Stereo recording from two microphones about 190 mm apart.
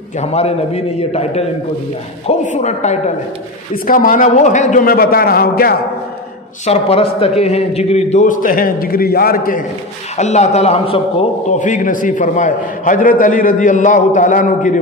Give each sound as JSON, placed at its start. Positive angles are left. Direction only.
{"t": 0.2, "sound": "a man's voice", "side_deg": 35}
{"t": 3.7, "sound": "a man's voice", "side_deg": 50}
{"t": 6.6, "sound": "a man's voice", "side_deg": 30}
{"t": 10.1, "sound": "a man's voice", "side_deg": 35}
{"t": 11.7, "sound": "a man's voice", "side_deg": 45}